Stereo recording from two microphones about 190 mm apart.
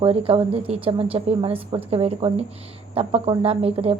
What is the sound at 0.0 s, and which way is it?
A woman's voice, 30° right (ahead or behind).